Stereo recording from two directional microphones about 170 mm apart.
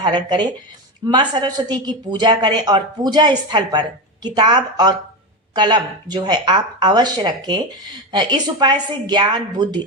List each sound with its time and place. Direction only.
0.0 s speech: 25° right (ahead or behind)